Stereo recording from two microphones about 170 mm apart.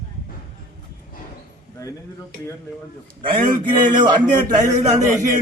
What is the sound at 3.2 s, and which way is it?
A man's voice, 30° right (ahead or behind).